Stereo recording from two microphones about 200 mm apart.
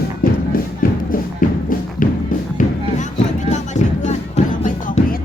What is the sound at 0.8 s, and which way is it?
Music, 45° left (ahead or behind).